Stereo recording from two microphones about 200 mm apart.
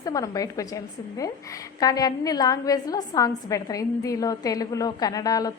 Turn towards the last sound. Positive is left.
turn(degrees=20)  # may be behind; listen again after turning